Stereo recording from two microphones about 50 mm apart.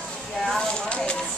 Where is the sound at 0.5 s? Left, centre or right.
Left.